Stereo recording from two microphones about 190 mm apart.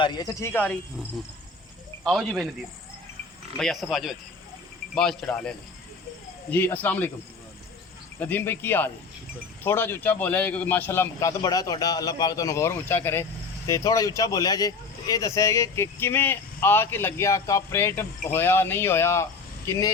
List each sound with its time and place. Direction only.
0.0 s speech: 20° left (ahead or behind)
2.0 s speech: centre (ahead or behind)
3.6 s speech: centre (ahead or behind)
8.2 s speech: 10° left (ahead or behind)